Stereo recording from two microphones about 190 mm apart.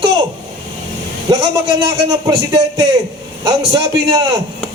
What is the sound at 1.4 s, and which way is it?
A man's voice, 25° right (ahead or behind).